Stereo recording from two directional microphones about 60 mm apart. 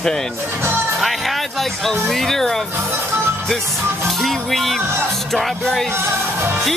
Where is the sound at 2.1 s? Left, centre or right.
Centre.